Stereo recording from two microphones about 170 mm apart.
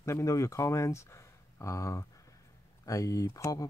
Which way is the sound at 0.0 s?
20° left (ahead or behind).